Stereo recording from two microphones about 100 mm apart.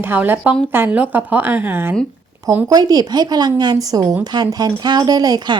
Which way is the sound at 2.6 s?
40° right (ahead or behind).